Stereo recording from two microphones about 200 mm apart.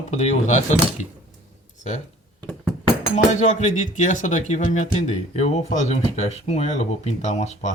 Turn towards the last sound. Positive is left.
turn(degrees=35)  # may be behind; listen again after turning